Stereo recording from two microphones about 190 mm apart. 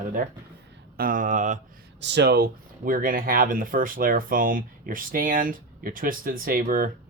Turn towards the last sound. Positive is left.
turn(degrees=-50)  # may be behind; listen again after turning